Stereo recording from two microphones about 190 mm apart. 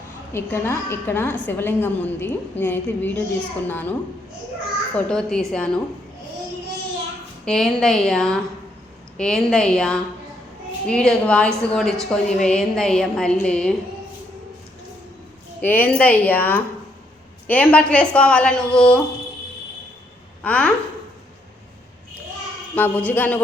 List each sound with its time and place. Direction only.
0.3 s a woman's voice: 10° left (ahead or behind)
5.0 s a woman's voice: 5° left (ahead or behind)
7.4 s a woman's voice: 5° left (ahead or behind)
15.6 s a woman's voice: 10° left (ahead or behind)
20.4 s a woman's voice: 5° left (ahead or behind)
22.7 s a woman's voice: 10° left (ahead or behind)